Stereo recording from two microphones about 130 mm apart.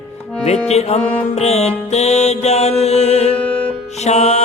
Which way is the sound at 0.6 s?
55° left (ahead or behind).